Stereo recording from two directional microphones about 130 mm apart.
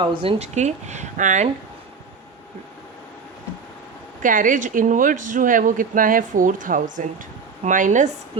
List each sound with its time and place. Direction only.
0.0 s speech: 40° right (ahead or behind); by 1.5 s 75° right (ahead or behind)
4.2 s speech: 90° right; by 8.1 s 70° right (ahead or behind)